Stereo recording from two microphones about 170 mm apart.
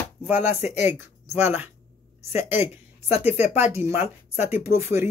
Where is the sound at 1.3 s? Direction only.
10° right (ahead or behind).